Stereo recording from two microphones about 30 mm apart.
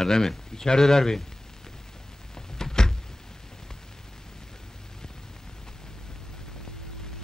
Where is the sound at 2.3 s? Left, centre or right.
Centre.